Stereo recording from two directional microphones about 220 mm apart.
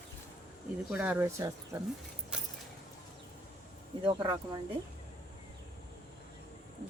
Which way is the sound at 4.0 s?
20° right (ahead or behind).